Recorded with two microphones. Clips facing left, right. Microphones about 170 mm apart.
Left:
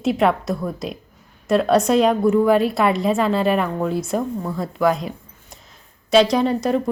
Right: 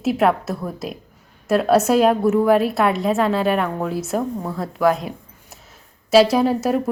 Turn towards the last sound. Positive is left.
turn(degrees=-5)  # may be behind; listen again after turning